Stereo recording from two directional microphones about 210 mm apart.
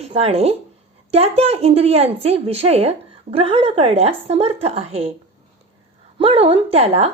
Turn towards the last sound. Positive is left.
turn(degrees=-30)  # may be behind; listen again after turning